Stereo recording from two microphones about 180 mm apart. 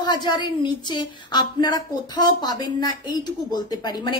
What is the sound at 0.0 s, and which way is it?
A woman's voice, 25° left (ahead or behind).